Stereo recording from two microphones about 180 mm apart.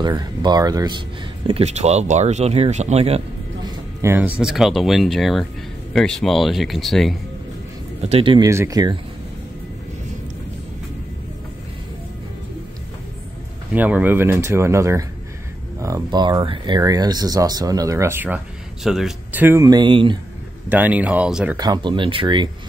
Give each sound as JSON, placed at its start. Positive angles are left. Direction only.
{"t": 0.0, "sound": "speech", "side_deg": -20}
{"t": 1.5, "sound": "speech", "side_deg": -35}
{"t": 4.0, "sound": "speech", "side_deg": -10}
{"t": 8.0, "sound": "speech", "side_deg": -30}
{"t": 8.5, "sound": "speech", "side_deg": -15}
{"t": 13.7, "sound": "speech", "side_deg": -10}
{"t": 20.7, "sound": "speech", "side_deg": -10}
{"t": 21.5, "sound": "speech", "side_deg": -25}